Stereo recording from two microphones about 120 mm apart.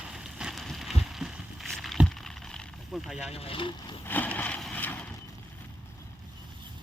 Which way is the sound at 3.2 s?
60° left (ahead or behind).